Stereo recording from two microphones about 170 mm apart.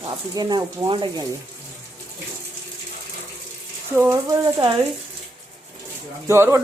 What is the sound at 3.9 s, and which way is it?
Speech, 15° right (ahead or behind).